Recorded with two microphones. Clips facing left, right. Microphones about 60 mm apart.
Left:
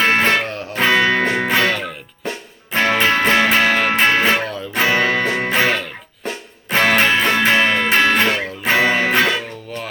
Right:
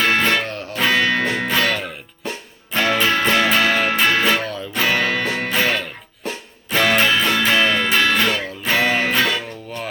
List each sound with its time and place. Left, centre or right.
0.0 s music: left
0.4 s music: centre
0.8 s music: left
2.7 s music: left
4.4 s music: centre
4.7 s music: left
5.5 s music: left
6.2 s music: left